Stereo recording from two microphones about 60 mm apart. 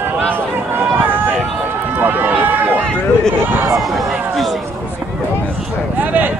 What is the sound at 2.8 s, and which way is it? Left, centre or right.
Speech, centre.